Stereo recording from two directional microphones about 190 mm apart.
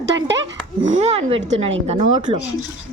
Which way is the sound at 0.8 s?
35° right (ahead or behind).